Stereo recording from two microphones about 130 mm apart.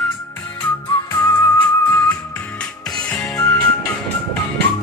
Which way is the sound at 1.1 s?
25° left (ahead or behind).